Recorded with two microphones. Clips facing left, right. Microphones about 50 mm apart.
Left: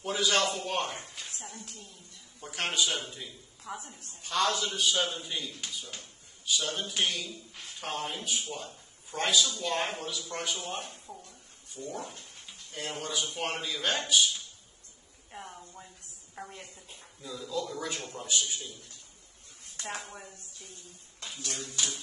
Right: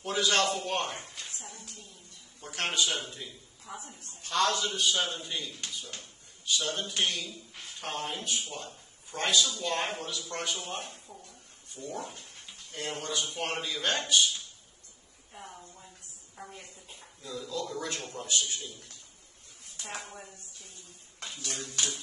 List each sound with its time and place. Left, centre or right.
0.0 s a man's voice: centre
1.4 s a sound: left
2.4 s a man's voice: centre
3.7 s a woman's voice: left
4.2 s a man's voice: centre
11.8 s speech: right
12.4 s a man's voice: centre
16.4 s a sound: left
16.9 s a man's voice: centre
19.6 s a sound: left